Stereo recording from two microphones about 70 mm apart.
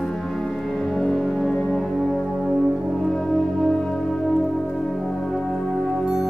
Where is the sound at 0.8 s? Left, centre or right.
Centre.